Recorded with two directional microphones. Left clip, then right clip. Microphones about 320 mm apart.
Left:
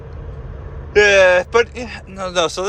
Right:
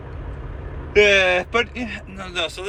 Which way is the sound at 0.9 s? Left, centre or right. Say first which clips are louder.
Left 4 dB; centre.